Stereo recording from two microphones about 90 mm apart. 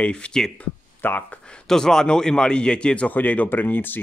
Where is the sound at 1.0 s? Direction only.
20° left (ahead or behind).